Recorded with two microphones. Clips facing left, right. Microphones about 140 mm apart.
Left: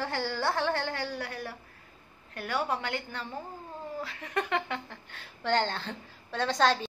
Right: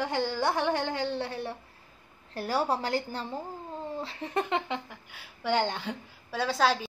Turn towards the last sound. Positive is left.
turn(degrees=-5)  # may be behind; listen again after turning